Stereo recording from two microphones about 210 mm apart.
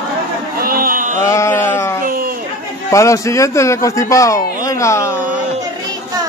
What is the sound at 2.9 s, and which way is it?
A man's voice, 15° left (ahead or behind).